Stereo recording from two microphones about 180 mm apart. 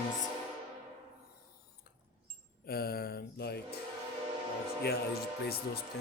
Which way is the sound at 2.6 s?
60° left (ahead or behind).